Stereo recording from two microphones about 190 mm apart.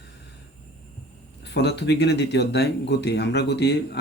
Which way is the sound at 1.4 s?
65° left (ahead or behind).